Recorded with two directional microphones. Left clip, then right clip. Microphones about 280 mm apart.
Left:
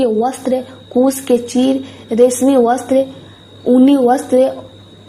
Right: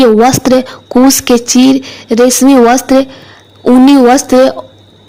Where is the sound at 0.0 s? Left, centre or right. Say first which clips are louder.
Right 9 dB; right.